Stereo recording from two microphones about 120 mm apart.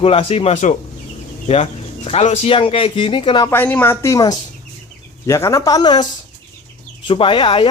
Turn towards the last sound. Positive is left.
turn(degrees=45)  # may be behind; listen again after turning